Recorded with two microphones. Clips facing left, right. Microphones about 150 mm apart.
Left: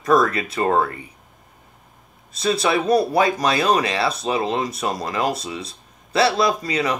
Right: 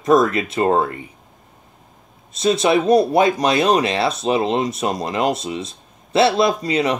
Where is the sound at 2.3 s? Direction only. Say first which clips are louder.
Right 4 dB; 25° right (ahead or behind).